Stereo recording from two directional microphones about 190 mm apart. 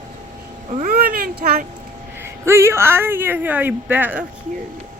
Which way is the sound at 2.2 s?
15° right (ahead or behind).